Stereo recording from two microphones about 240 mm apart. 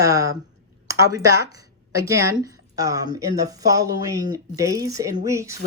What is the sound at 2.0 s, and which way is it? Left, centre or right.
A woman's voice, centre.